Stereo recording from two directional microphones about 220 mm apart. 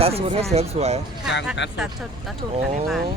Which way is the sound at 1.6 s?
55° left (ahead or behind).